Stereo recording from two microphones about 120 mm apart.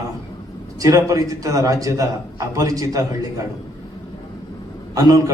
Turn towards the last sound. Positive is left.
turn(degrees=-30)  # may be behind; listen again after turning